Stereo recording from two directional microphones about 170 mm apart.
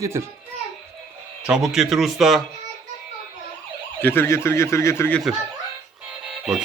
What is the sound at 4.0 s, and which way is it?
Speech, 10° left (ahead or behind).